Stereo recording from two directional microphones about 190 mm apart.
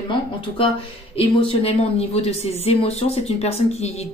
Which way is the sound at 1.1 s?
30° left (ahead or behind).